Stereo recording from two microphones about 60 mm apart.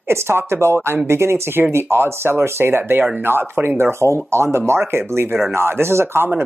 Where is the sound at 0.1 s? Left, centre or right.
Right.